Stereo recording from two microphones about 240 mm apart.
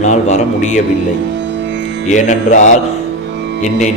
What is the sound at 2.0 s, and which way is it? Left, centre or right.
Speech, left.